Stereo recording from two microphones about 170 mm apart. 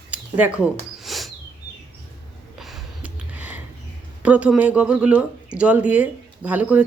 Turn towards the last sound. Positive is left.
turn(degrees=-10)  # may be behind; listen again after turning